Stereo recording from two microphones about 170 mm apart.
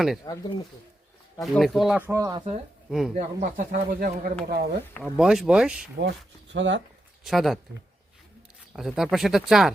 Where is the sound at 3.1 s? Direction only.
50° right (ahead or behind).